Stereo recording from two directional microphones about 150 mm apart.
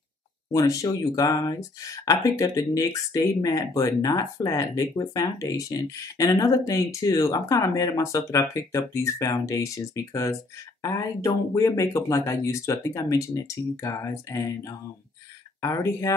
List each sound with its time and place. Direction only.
0.5 s speech: 20° left (ahead or behind)